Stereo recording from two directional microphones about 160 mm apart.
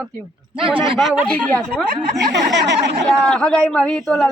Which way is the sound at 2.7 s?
90° right.